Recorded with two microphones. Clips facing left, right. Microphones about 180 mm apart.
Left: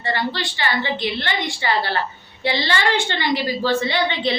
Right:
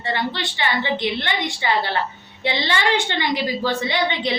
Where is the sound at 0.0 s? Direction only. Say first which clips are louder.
Left 1 dB; 20° right (ahead or behind).